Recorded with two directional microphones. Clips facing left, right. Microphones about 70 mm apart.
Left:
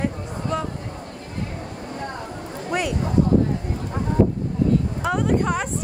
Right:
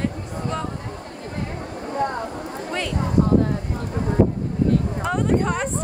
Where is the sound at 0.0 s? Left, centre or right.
Centre.